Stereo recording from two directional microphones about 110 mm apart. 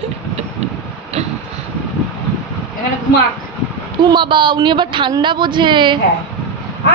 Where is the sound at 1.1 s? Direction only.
75° right (ahead or behind).